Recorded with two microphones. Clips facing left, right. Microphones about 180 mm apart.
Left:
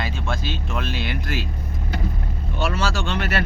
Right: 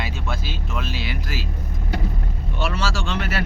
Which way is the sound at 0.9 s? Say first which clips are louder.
Left 2 dB; 55° left (ahead or behind).